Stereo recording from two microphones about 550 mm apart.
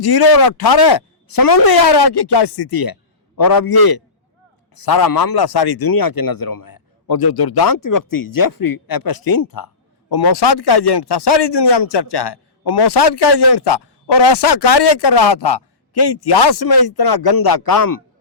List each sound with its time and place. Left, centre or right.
0.0 s a man's voice: left